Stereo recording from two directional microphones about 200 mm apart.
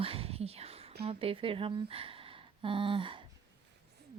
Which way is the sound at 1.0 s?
30° right (ahead or behind).